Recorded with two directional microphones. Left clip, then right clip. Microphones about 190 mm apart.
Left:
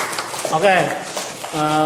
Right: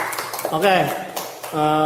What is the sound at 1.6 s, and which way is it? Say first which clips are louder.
Speech: even; 40° right (ahead or behind).